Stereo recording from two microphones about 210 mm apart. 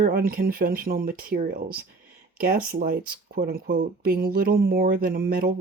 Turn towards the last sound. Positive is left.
turn(degrees=-45)  # may be behind; listen again after turning